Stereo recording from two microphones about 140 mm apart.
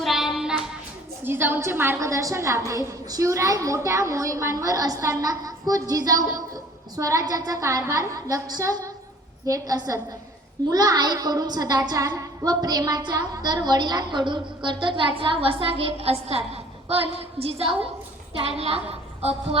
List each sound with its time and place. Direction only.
0.0 s music: centre (ahead or behind)
1.2 s a woman's voice: 15° right (ahead or behind); by 19.5 s 45° right (ahead or behind)